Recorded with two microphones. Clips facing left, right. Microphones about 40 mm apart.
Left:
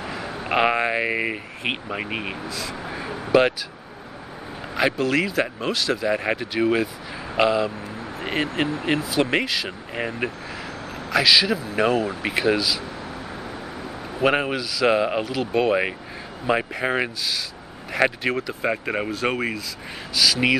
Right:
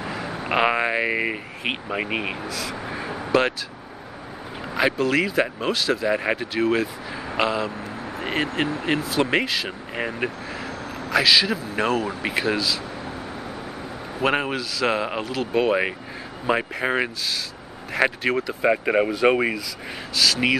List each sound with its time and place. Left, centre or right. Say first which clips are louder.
0.0 s speech: right 1 dB; centre
2.9 s a sound: right 1 dB; centre
4.7 s speech: even; centre
14.2 s speech: left 2 dB; centre
20.2 s speech: left 1 dB; centre